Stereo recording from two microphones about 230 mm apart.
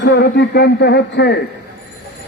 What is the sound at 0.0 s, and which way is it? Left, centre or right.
A man's voice, left.